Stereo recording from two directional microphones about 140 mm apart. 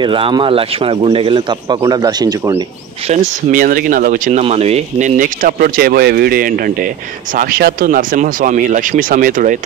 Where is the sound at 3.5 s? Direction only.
80° right.